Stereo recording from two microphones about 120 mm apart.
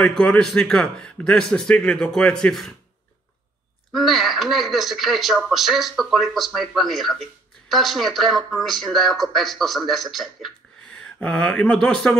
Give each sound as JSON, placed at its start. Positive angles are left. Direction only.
{"t": 0.0, "sound": "speech", "side_deg": 5}
{"t": 3.9, "sound": "speech", "side_deg": 0}